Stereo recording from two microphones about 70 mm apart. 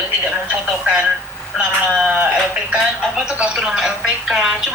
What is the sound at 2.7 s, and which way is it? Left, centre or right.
Speech, centre.